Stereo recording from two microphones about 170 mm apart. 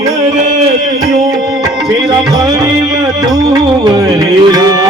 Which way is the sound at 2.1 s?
25° right (ahead or behind).